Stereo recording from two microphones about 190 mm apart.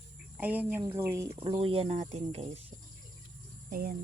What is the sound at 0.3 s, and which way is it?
Speech, 10° right (ahead or behind).